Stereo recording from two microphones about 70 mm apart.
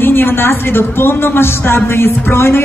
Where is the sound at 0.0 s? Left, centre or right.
Left.